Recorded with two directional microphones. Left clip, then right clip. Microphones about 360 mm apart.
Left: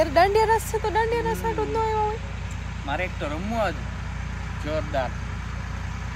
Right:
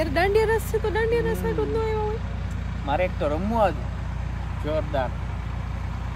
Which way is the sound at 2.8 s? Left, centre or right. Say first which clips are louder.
Right 4 dB; right.